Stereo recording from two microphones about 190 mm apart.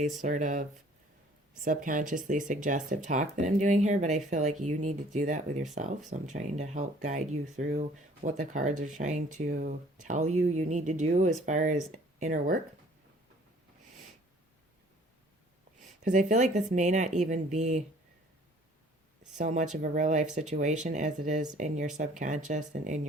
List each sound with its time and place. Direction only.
0.2 s speech: 40° right (ahead or behind)
15.8 s a sound: 40° right (ahead or behind)
16.7 s speech: 40° right (ahead or behind)
19.4 s speech: 40° right (ahead or behind)